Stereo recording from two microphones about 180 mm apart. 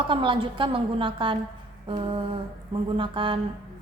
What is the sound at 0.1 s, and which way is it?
A woman's voice, 30° right (ahead or behind).